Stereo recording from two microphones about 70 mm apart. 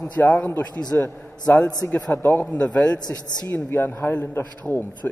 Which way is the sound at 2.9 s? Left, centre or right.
Left.